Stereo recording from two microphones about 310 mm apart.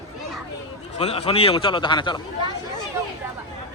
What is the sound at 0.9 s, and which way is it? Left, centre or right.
A man's voice, centre.